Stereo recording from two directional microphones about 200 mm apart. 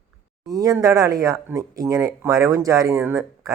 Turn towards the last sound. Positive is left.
turn(degrees=-15)  # may be behind; listen again after turning